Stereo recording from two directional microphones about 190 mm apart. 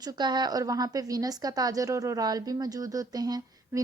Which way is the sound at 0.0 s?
20° right (ahead or behind).